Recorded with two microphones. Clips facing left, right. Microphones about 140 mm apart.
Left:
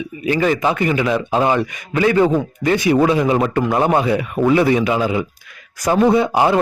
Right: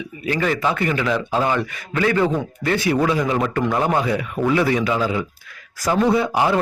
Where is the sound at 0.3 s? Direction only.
20° left (ahead or behind).